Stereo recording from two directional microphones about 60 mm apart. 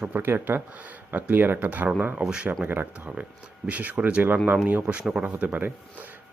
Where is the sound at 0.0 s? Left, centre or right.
Right.